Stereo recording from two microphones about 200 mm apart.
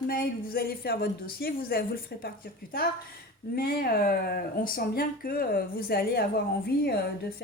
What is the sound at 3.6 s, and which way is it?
Speech, 45° left (ahead or behind).